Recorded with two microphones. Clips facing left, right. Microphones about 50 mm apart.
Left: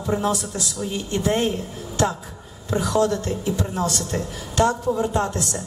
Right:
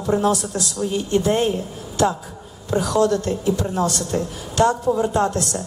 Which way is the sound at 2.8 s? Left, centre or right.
Left.